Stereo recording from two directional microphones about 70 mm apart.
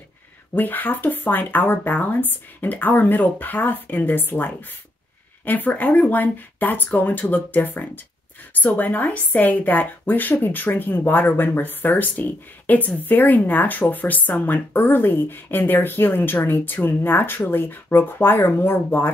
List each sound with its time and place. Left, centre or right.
0.6 s a woman's voice: left